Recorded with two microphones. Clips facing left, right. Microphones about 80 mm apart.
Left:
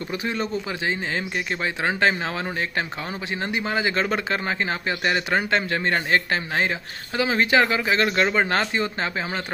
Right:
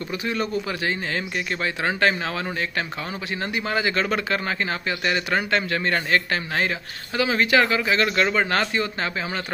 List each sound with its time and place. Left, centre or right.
0.1 s a man's voice: left